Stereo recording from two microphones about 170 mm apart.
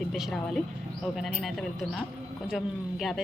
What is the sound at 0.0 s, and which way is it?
A woman's voice, centre (ahead or behind).